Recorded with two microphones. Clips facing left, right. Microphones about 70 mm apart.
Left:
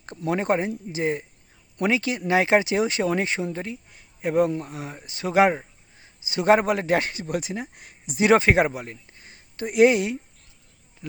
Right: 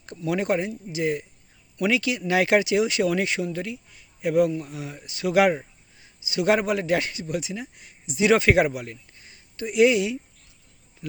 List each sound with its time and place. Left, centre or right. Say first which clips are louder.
0.0 s a man's voice: even; left